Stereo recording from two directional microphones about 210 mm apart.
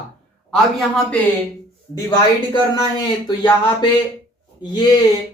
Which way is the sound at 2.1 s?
20° left (ahead or behind).